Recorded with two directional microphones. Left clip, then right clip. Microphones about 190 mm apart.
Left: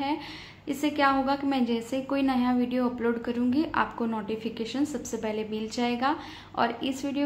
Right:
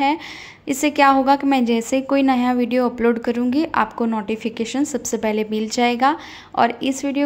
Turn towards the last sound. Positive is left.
turn(degrees=-35)  # may be behind; listen again after turning